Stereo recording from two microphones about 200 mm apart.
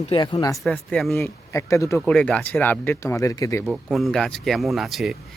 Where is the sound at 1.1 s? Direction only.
15° left (ahead or behind).